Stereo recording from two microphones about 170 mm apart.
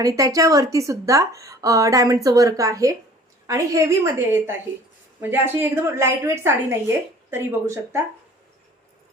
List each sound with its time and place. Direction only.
0.0 s a woman's voice: 20° right (ahead or behind)